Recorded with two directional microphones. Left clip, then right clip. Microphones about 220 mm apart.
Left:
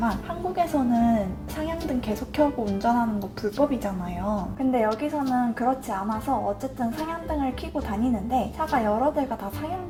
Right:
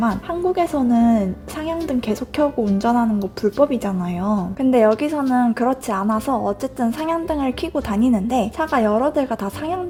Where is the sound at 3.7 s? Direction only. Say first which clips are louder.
Right 6 dB; 45° right (ahead or behind).